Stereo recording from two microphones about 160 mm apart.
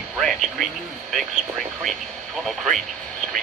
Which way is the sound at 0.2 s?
Centre (ahead or behind).